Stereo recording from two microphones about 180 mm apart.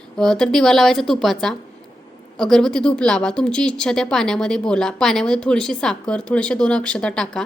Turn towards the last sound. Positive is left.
turn(degrees=5)  # may be behind; listen again after turning